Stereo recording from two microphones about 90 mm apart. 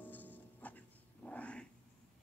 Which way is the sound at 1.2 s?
15° left (ahead or behind).